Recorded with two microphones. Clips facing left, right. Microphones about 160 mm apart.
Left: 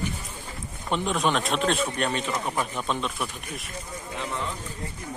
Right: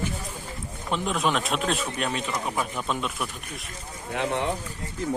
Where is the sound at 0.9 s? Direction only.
Centre (ahead or behind).